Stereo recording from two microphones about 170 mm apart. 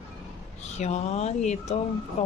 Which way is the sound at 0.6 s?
40° left (ahead or behind).